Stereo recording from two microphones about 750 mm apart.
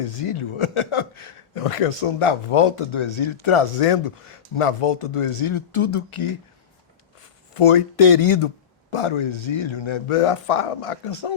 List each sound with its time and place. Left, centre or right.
0.0 s a man's voice: left
7.5 s a man's voice: left